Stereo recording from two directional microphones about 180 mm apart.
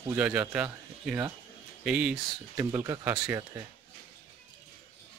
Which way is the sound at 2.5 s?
15° right (ahead or behind).